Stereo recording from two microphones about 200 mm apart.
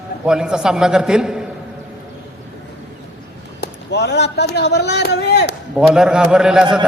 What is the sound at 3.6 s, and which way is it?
A man's voice, 60° left (ahead or behind).